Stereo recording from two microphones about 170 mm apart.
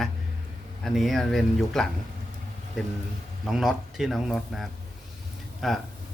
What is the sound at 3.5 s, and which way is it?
Speech, centre (ahead or behind).